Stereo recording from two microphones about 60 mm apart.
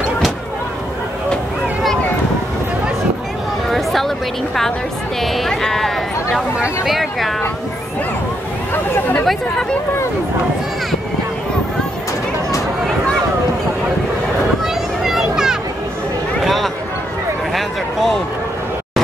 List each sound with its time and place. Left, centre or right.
3.7 s a sound: centre
5.2 s speech: centre
8.7 s speech: left
9.2 s speech: centre
14.6 s children playing: centre
16.4 s a sound: centre